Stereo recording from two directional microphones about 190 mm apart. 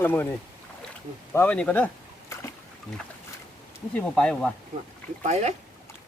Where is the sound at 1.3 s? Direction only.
10° left (ahead or behind).